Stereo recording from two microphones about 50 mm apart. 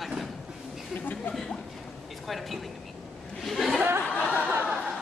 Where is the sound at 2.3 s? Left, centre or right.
Centre.